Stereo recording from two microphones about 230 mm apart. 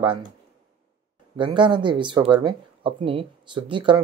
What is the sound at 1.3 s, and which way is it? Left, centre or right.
Speech, right.